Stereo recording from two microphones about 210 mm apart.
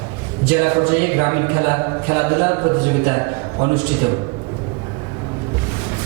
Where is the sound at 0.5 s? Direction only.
15° right (ahead or behind).